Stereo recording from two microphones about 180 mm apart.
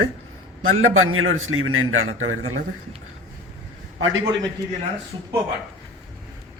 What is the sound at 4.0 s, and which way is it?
Speech, 90° right.